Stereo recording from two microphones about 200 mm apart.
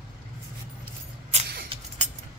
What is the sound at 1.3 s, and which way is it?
Vehicle, 35° right (ahead or behind).